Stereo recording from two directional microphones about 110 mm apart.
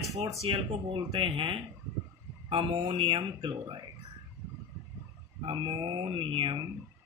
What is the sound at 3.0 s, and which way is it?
Speech, 50° right (ahead or behind).